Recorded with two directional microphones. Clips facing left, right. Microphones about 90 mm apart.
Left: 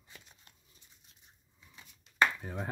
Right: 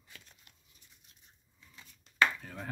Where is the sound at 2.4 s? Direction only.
20° left (ahead or behind).